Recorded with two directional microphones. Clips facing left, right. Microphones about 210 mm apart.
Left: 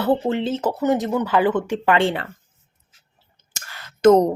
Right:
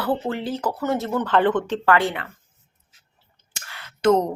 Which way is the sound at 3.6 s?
40° left (ahead or behind).